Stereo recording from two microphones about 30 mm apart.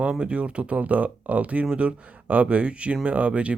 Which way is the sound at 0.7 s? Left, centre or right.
Right.